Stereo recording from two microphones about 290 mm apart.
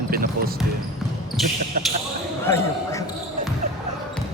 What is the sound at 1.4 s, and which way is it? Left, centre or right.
Speech, centre.